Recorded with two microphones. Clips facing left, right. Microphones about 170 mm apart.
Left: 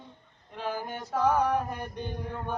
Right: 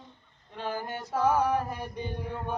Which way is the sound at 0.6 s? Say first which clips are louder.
Even; centre (ahead or behind).